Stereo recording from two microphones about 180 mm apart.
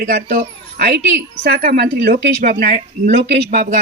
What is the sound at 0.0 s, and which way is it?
Speech, 50° right (ahead or behind).